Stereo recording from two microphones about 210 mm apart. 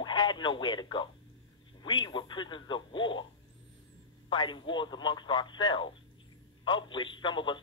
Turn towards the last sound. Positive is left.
turn(degrees=20)  # may be behind; listen again after turning